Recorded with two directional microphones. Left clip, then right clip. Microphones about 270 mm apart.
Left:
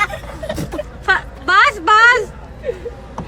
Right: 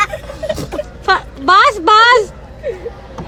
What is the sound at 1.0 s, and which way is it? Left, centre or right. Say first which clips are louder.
A woman's voice: right 4 dB; centre.